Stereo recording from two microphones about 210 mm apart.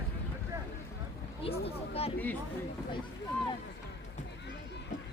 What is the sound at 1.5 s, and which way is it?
Speech, 30° left (ahead or behind).